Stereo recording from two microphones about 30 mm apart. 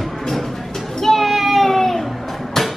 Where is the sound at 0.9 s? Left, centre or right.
Centre.